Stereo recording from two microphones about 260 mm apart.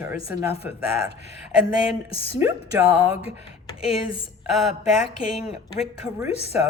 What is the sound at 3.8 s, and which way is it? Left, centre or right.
Speech, centre.